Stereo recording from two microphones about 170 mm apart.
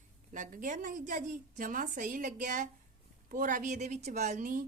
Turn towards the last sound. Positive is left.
turn(degrees=-50)  # may be behind; listen again after turning